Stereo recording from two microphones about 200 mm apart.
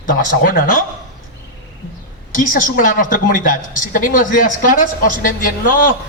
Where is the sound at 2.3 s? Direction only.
45° left (ahead or behind).